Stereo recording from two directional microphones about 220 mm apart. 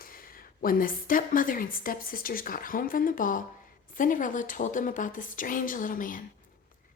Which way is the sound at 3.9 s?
35° left (ahead or behind).